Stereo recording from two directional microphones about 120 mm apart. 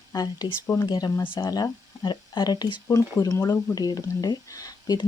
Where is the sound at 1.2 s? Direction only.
40° left (ahead or behind).